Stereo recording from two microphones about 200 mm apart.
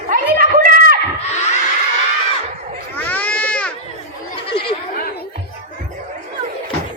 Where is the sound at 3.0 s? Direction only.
10° left (ahead or behind).